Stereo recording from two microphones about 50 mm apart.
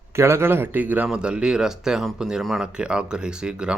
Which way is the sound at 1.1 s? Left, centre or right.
Centre.